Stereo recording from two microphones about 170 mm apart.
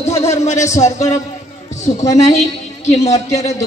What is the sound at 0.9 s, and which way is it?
A man's voice, 40° left (ahead or behind).